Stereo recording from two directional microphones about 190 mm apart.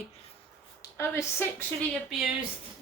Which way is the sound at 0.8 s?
15° left (ahead or behind).